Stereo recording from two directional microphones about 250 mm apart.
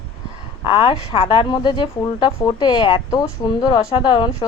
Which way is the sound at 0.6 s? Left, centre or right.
Left.